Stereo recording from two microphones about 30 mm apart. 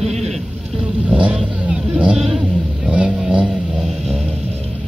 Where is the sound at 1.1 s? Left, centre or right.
Right.